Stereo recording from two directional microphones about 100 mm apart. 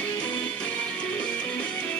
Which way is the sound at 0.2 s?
10° left (ahead or behind).